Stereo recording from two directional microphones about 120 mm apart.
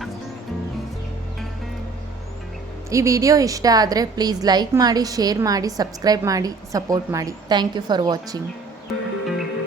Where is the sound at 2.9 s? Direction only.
25° right (ahead or behind).